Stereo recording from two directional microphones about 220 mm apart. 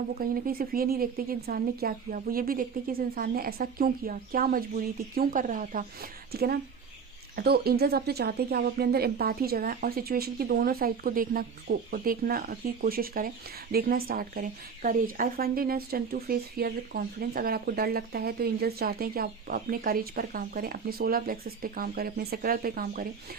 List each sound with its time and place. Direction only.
0.1 s speech: 40° right (ahead or behind)